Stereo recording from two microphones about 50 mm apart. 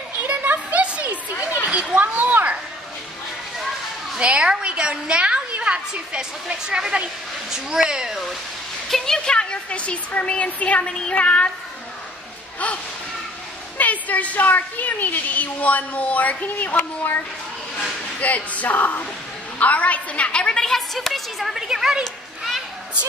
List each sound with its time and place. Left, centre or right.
0.3 s a sound: right
4.2 s a woman's voice: centre
8.9 s a woman's voice: centre
9.3 s a woman's voice: left
13.7 s a woman's voice: left
18.2 s a woman's voice: left
19.6 s a sound: left
20.6 s a woman's voice: centre